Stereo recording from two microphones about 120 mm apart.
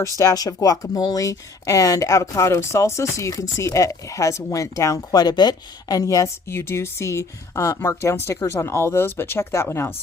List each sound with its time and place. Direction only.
0.2 s speech: 30° left (ahead or behind)